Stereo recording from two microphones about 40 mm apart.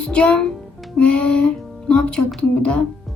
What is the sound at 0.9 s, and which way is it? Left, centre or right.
Music, left.